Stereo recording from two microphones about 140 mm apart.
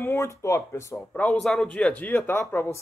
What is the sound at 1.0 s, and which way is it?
Speech, 10° left (ahead or behind).